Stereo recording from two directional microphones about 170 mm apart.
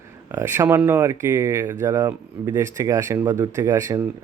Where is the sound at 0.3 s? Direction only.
15° right (ahead or behind).